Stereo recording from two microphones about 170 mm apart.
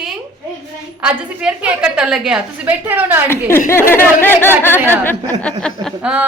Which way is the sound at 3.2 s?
15° left (ahead or behind).